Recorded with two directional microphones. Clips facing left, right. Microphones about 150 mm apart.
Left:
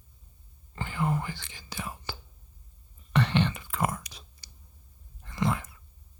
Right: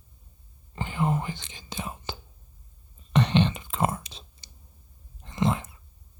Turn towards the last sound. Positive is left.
turn(degrees=-20)  # may be behind; listen again after turning